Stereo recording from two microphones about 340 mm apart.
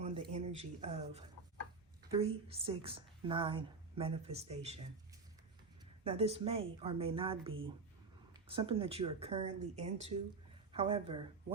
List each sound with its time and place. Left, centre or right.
0.0 s a sound: centre
2.1 s a woman's voice: centre
6.1 s a woman's voice: centre